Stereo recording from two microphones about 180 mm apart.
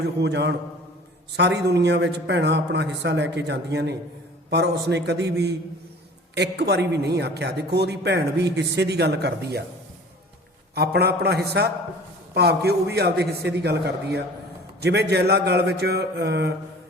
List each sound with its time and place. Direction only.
0.0 s a man's voice: 65° right (ahead or behind)
10.8 s a man's voice: 65° right (ahead or behind)